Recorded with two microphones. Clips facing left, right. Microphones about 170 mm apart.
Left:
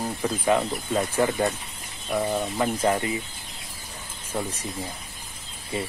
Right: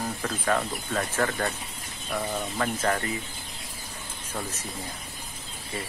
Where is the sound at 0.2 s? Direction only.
15° left (ahead or behind).